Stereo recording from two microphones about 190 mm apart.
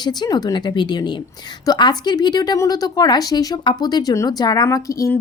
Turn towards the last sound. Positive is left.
turn(degrees=15)  # may be behind; listen again after turning